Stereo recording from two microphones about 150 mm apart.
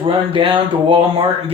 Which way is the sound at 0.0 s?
35° right (ahead or behind).